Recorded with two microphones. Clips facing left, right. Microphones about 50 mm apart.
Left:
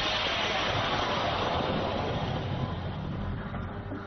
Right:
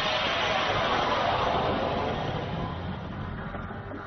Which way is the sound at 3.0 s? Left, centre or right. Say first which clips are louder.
Even; centre.